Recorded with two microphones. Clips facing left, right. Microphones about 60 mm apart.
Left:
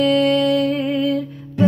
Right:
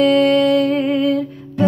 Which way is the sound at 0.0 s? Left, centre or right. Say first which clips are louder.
Right 3 dB; centre.